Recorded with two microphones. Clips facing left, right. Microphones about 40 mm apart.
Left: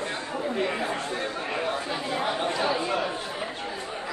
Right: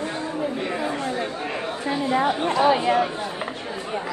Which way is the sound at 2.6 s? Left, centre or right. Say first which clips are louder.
Right 11 dB; right.